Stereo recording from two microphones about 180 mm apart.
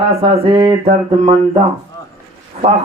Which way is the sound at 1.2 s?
40° right (ahead or behind).